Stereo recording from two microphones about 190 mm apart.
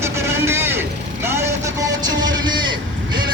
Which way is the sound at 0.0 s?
15° right (ahead or behind).